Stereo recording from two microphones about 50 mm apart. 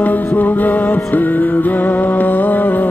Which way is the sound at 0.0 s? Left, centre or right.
Left.